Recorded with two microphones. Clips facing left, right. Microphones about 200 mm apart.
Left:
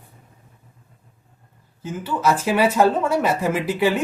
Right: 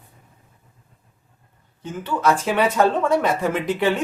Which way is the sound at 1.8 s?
5° left (ahead or behind).